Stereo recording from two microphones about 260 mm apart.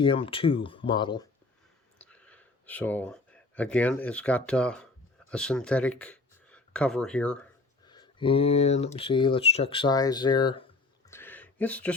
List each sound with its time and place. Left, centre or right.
0.0 s speech: centre
2.0 s speech: centre
7.9 s speech: centre
11.1 s a sound: centre